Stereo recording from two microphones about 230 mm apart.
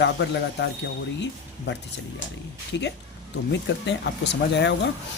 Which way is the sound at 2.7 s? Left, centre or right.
Left.